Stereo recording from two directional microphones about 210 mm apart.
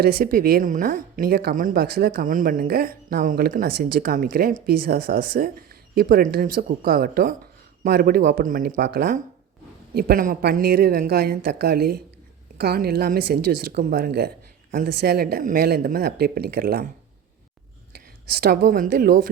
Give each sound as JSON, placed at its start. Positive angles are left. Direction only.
{"t": 0.0, "sound": "a woman's voice", "side_deg": -45}
{"t": 17.9, "sound": "a woman's voice", "side_deg": -50}